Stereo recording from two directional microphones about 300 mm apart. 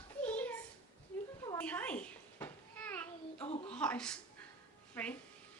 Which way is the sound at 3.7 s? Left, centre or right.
Centre.